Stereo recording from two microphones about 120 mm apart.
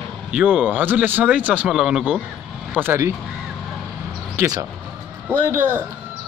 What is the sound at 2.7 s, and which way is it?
Speech, 15° right (ahead or behind).